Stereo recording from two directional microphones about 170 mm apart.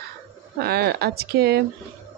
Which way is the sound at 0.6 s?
65° right (ahead or behind).